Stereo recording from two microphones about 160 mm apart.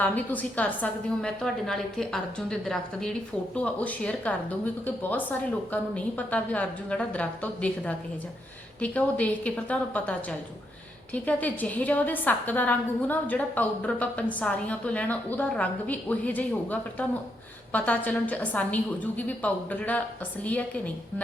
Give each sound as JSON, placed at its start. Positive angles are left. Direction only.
{"t": 0.0, "sound": "a woman's voice", "side_deg": 10}